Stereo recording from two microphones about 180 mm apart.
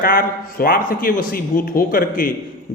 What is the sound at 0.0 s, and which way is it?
A man's voice, 50° left (ahead or behind).